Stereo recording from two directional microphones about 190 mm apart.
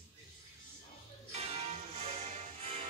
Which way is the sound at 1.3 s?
35° right (ahead or behind).